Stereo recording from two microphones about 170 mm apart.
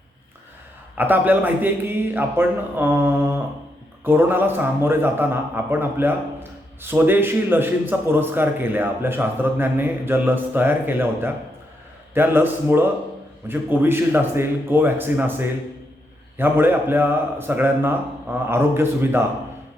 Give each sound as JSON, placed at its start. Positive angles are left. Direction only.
{"t": 0.9, "sound": "a man's voice", "side_deg": -10}